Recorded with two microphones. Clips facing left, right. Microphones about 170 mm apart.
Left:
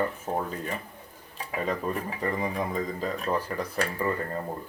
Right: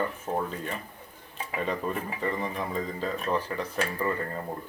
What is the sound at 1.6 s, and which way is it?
Speech, 5° left (ahead or behind).